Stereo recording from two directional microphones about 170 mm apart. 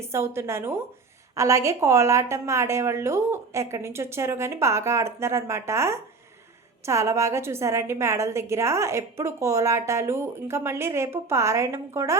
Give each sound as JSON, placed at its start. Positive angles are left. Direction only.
{"t": 0.0, "sound": "a woman's voice", "side_deg": -15}